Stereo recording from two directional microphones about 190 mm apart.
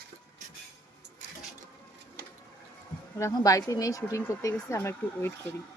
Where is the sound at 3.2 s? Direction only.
15° left (ahead or behind).